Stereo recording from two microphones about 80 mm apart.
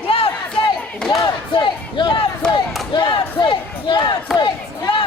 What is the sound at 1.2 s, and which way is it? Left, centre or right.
Battle cry, left.